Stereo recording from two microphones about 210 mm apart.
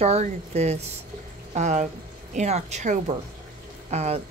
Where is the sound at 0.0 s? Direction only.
30° right (ahead or behind).